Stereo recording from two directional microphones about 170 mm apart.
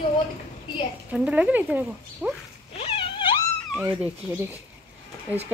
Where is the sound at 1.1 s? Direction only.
5° right (ahead or behind).